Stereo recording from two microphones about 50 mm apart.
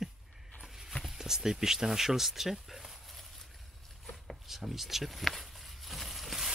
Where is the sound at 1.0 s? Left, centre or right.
Centre.